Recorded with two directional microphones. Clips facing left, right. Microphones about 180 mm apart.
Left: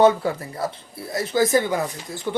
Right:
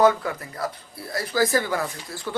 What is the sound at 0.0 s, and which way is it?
Speech, 30° left (ahead or behind).